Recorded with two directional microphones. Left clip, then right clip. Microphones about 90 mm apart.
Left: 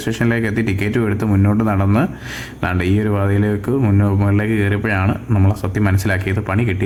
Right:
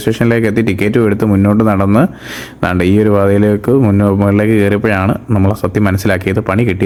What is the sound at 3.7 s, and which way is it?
Speech, 15° right (ahead or behind).